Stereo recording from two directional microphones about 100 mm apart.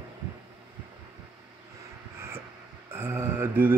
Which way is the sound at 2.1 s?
25° right (ahead or behind).